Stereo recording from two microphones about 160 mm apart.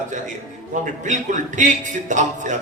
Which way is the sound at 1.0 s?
50° right (ahead or behind).